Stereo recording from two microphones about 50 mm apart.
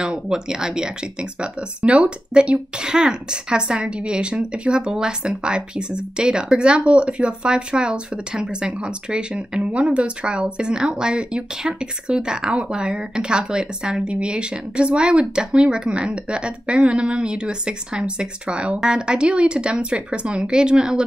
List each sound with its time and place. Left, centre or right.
0.0 s speech: centre